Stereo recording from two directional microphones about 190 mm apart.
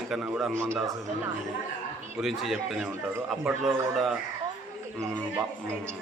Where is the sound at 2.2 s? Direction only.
Centre (ahead or behind).